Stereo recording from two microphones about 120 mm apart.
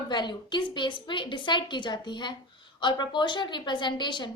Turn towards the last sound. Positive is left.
turn(degrees=40)  # may be behind; listen again after turning